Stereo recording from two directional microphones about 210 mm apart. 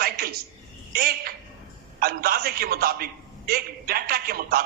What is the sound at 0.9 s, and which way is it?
A man's voice, 45° right (ahead or behind).